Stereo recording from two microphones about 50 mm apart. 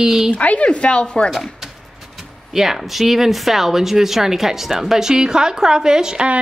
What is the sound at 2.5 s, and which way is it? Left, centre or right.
Speech, centre.